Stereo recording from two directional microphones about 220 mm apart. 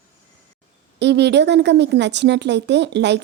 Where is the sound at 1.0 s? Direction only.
50° right (ahead or behind).